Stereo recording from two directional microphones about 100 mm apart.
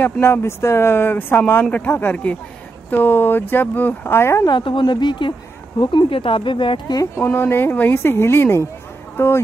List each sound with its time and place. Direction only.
0.0 s speech: 25° left (ahead or behind)
4.5 s speech: 50° left (ahead or behind)
7.0 s speech: 25° left (ahead or behind)